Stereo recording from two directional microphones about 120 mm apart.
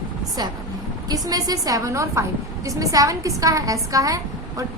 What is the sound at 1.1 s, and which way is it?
A woman's voice, 30° right (ahead or behind).